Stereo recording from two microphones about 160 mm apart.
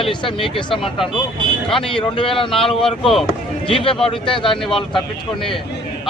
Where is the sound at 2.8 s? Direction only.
5° left (ahead or behind).